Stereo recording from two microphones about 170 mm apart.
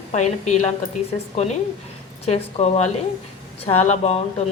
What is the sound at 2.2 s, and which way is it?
A woman's voice, 40° left (ahead or behind).